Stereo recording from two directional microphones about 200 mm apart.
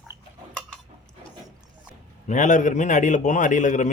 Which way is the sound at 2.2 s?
40° left (ahead or behind).